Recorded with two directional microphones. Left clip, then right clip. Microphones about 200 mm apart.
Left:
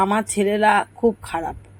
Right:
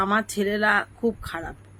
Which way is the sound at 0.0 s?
10° left (ahead or behind).